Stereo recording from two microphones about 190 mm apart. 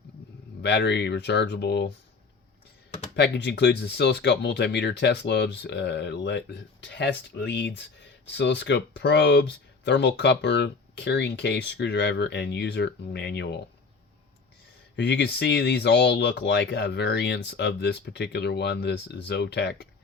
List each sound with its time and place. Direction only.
0.6 s speech: 65° left (ahead or behind)
3.2 s speech: 65° left (ahead or behind)
14.9 s speech: 65° left (ahead or behind)